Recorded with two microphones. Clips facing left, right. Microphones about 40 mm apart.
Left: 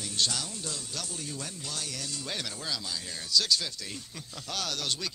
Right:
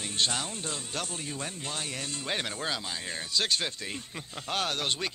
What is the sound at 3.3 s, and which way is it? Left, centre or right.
Speech, right.